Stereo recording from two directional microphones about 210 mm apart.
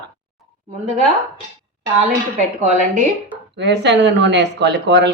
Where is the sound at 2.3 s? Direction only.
35° right (ahead or behind).